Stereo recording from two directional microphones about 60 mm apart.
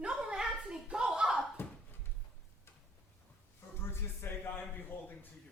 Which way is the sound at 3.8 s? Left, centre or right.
Left.